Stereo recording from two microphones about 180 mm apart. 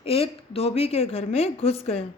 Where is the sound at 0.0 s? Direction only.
35° left (ahead or behind).